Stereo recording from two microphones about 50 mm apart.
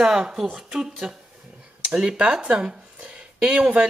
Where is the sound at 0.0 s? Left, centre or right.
Centre.